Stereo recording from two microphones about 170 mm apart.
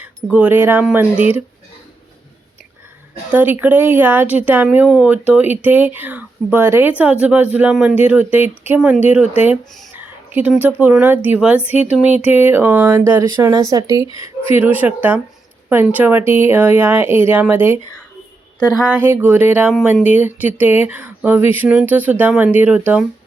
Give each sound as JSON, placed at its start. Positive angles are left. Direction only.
{"t": 0.0, "sound": "speech", "side_deg": -10}
{"t": 3.3, "sound": "speech", "side_deg": -10}
{"t": 18.6, "sound": "speech", "side_deg": 20}
{"t": 18.9, "sound": "speech", "side_deg": -15}